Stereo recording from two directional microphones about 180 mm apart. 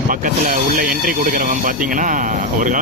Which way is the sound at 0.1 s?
50° right (ahead or behind).